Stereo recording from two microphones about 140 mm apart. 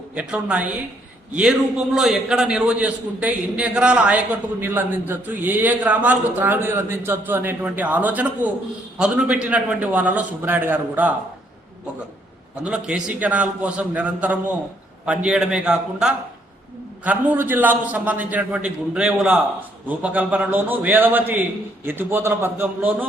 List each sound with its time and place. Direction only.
0.1 s a man's voice: 10° right (ahead or behind)
2.0 s a man's voice: 5° right (ahead or behind)
12.5 s a man's voice: 5° right (ahead or behind)